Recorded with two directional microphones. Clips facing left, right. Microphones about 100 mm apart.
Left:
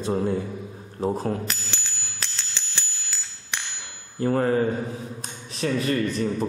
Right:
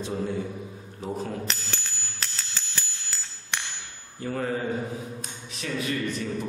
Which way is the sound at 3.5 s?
Centre (ahead or behind).